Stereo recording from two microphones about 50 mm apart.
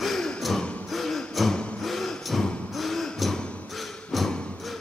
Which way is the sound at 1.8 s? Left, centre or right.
Centre.